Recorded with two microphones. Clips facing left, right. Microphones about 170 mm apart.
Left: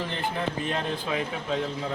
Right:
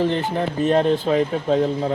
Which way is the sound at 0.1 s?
40° right (ahead or behind).